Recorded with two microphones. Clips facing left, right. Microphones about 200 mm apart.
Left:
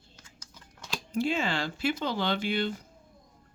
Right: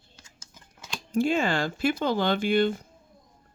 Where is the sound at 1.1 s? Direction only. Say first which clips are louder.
Right 5 dB; 50° right (ahead or behind).